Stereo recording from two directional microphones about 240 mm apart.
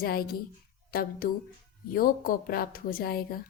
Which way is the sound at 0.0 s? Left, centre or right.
Left.